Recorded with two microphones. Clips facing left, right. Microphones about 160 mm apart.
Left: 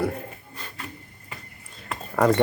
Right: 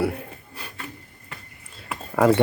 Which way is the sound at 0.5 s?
10° right (ahead or behind).